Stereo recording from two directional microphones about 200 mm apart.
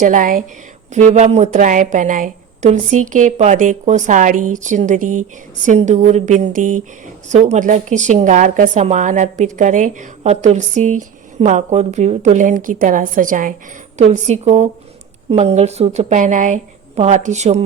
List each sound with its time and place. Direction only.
0.0 s a woman's voice: 40° right (ahead or behind)